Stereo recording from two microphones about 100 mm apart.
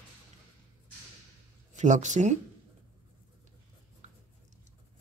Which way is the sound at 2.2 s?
90° right.